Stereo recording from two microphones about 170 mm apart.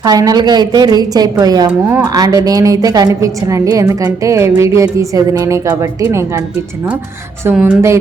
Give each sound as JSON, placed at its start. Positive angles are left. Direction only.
{"t": 0.0, "sound": "a woman's voice", "side_deg": -20}
{"t": 7.5, "sound": "speech", "side_deg": -5}